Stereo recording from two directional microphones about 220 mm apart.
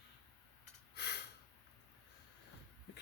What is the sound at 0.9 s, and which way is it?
Snort, 50° left (ahead or behind).